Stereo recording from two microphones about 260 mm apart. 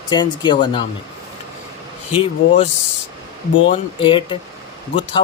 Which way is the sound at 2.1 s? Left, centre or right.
Left.